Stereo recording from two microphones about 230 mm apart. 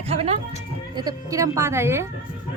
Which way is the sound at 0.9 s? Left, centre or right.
Centre.